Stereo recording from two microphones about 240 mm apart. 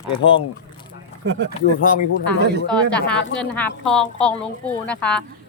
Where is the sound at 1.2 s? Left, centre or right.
Right.